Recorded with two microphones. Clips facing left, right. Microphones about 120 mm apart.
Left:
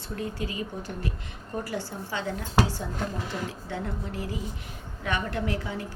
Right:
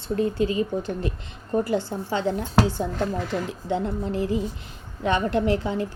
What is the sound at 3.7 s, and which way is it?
A woman's voice, 25° right (ahead or behind).